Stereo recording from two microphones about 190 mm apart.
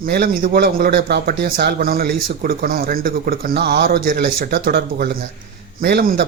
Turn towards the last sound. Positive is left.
turn(degrees=-55)  # may be behind; listen again after turning